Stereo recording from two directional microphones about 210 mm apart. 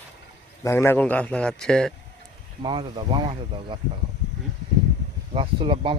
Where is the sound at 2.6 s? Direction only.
20° right (ahead or behind).